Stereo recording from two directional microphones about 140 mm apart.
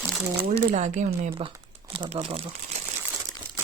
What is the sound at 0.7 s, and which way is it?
Speech, 60° right (ahead or behind).